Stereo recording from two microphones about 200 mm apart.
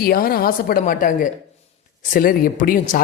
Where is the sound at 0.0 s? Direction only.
50° left (ahead or behind).